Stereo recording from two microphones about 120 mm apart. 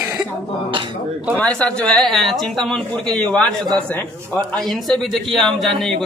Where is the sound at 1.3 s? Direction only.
10° left (ahead or behind).